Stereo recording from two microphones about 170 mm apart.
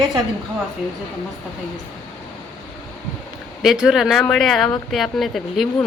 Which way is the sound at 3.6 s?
5° right (ahead or behind).